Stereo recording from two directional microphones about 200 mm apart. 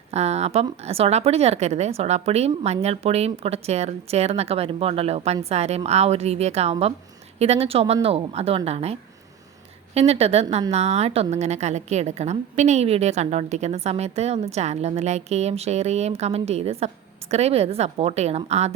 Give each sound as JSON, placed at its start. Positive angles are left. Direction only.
{"t": 0.1, "sound": "a woman's voice", "side_deg": -30}